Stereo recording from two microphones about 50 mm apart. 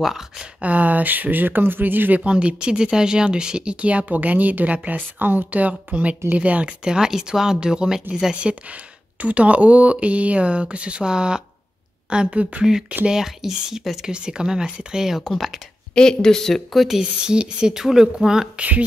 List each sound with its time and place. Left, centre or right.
0.0 s speech: centre
0.6 s speech: right
2.2 s speech: right
9.2 s speech: right
13.0 s speech: centre
15.9 s speech: centre
16.7 s speech: centre
17.0 s speech: centre